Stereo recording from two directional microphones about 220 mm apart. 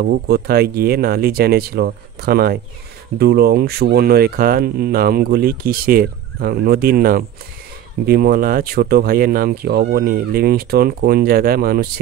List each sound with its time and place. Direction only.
0.0 s speech: 45° right (ahead or behind)